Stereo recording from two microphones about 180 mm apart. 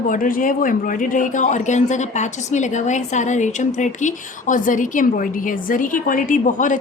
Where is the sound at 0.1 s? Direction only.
50° left (ahead or behind).